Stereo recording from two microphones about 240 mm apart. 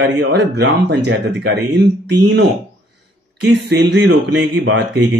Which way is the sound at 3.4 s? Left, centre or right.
Right.